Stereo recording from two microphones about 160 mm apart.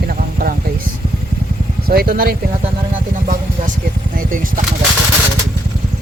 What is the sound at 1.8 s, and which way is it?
Speech, 65° right (ahead or behind).